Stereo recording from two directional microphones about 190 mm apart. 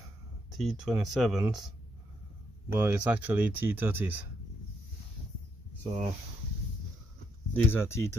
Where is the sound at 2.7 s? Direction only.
10° right (ahead or behind).